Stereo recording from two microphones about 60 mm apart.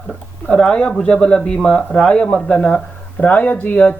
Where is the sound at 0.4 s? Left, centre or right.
Centre.